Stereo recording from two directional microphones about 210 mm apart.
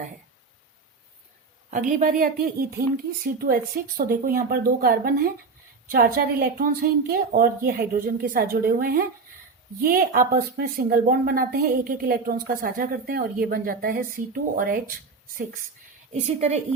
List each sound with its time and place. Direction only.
1.9 s a woman's voice: 40° right (ahead or behind)
16.2 s a woman's voice: 30° right (ahead or behind)